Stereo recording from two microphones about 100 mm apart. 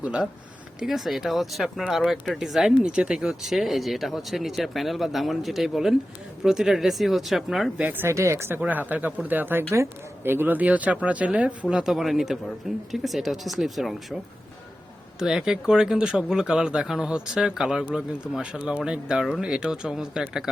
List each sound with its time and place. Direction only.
0.0 s speech: 10° right (ahead or behind)
7.8 s speech: 20° right (ahead or behind); by 14.2 s centre (ahead or behind)
15.2 s speech: 5° right (ahead or behind)